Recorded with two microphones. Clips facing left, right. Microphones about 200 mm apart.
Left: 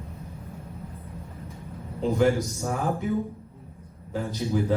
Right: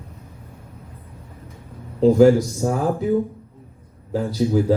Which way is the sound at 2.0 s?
35° right (ahead or behind).